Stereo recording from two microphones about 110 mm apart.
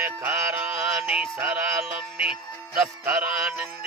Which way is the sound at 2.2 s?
5° right (ahead or behind).